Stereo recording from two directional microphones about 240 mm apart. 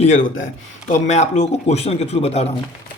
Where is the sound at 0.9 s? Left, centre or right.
Left.